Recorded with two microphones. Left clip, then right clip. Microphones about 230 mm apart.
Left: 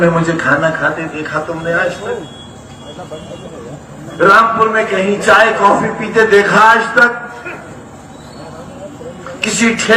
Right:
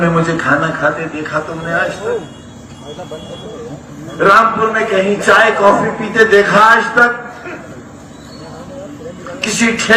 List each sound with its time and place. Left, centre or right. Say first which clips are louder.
0.0 s a man's voice: left 2 dB; left
4.2 s a man's voice: left 1 dB; left
9.4 s a man's voice: left 1 dB; left